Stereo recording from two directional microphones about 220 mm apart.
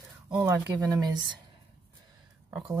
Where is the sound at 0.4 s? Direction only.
15° right (ahead or behind).